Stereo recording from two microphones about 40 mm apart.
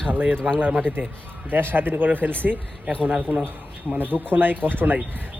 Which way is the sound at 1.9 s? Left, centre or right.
Right.